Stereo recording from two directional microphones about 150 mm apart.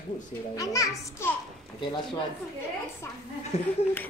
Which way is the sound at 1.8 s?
35° left (ahead or behind).